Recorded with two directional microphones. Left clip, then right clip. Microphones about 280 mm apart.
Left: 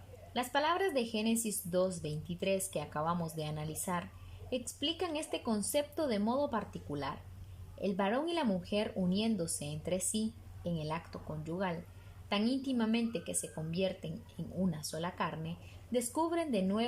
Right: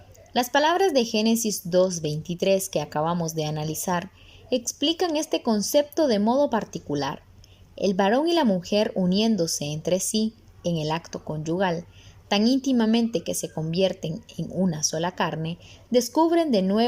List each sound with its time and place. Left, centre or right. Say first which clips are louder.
0.3 s speech: right 11 dB; right